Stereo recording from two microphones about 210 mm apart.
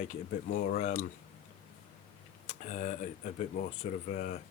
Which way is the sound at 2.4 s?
35° left (ahead or behind).